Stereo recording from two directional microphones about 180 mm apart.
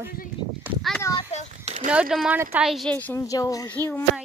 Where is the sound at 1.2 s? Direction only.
40° left (ahead or behind).